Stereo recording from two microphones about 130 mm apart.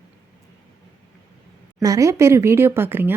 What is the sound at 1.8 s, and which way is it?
Speech, 25° right (ahead or behind).